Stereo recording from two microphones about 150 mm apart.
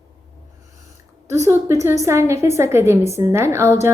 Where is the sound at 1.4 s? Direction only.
20° right (ahead or behind).